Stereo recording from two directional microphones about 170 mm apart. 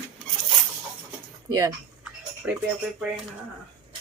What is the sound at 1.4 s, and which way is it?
Speech, 20° right (ahead or behind).